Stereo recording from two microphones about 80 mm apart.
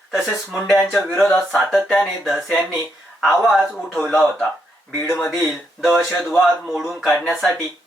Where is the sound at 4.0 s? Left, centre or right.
Centre.